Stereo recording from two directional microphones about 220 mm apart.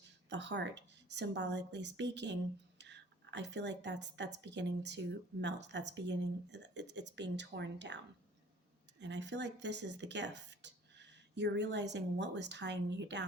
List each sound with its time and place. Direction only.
0.3 s a woman's voice: 50° right (ahead or behind)